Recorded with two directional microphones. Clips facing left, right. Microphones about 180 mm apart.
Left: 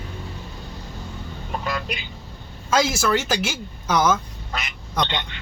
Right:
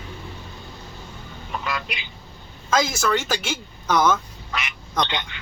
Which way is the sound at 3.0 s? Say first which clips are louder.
Left 2 dB; 5° left (ahead or behind).